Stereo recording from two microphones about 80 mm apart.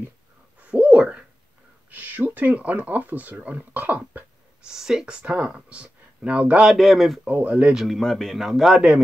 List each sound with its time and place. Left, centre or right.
0.6 s a sound: centre
1.9 s speech: right
4.6 s speech: centre
6.7 s a man's voice: centre
7.2 s speech: centre
7.7 s a man's voice: centre